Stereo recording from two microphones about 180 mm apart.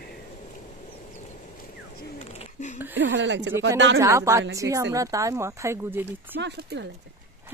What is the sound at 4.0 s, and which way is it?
Speech, 15° right (ahead or behind).